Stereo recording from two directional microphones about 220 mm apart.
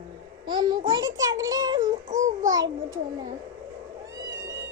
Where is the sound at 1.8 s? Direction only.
35° right (ahead or behind).